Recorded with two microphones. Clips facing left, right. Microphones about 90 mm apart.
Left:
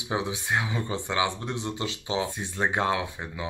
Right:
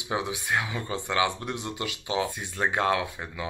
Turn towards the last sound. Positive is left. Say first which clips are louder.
# right 1 dB
turn(degrees=20)  # may be behind; listen again after turning